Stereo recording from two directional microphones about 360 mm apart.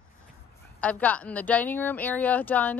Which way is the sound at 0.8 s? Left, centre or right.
Centre.